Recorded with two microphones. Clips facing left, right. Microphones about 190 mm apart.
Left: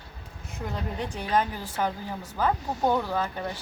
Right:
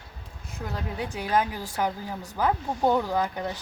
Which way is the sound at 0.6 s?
5° right (ahead or behind).